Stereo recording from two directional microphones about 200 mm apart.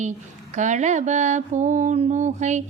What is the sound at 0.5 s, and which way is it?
Mantra, 35° right (ahead or behind).